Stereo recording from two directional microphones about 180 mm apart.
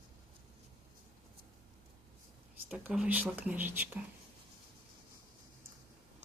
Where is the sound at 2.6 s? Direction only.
5° right (ahead or behind).